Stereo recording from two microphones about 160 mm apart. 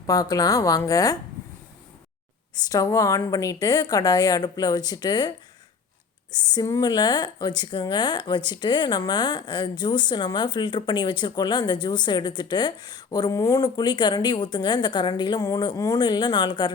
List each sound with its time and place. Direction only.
0.0 s speech: 20° left (ahead or behind)
2.6 s speech: 20° left (ahead or behind)
6.3 s speech: 25° left (ahead or behind)